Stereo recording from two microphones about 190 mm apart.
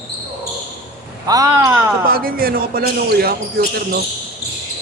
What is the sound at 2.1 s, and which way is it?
Speech, 50° right (ahead or behind).